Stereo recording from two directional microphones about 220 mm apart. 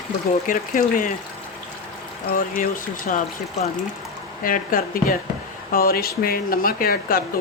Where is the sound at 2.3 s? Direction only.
40° left (ahead or behind).